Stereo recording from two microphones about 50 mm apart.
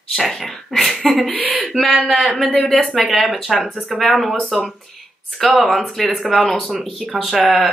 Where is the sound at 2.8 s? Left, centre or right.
Centre.